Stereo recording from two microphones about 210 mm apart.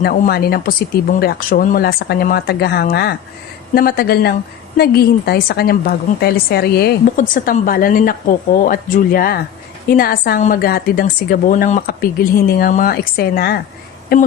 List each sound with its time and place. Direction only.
0.0 s a woman's voice: 50° left (ahead or behind)